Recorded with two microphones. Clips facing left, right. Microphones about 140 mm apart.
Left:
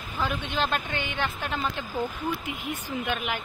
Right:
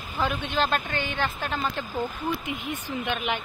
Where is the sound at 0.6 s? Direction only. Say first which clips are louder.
Right 3 dB; 15° left (ahead or behind).